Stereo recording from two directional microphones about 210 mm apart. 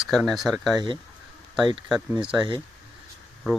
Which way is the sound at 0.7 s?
20° right (ahead or behind).